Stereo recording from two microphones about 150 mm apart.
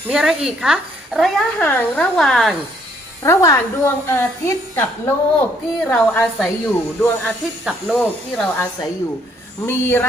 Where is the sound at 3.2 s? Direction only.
20° left (ahead or behind); by 8.1 s centre (ahead or behind).